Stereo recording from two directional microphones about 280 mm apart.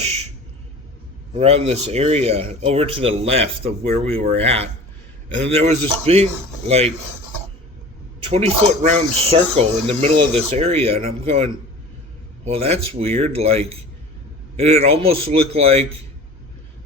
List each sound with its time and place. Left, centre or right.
0.0 s a sound: right
1.3 s speech: right
8.2 s speech: right
12.5 s speech: right